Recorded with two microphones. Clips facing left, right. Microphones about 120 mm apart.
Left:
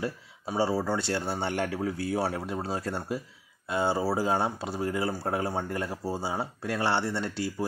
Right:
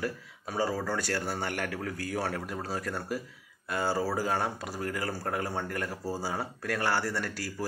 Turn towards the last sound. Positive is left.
turn(degrees=25)  # may be behind; listen again after turning